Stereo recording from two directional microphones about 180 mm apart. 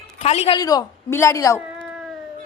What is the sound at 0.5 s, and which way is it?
A man's voice, 20° left (ahead or behind).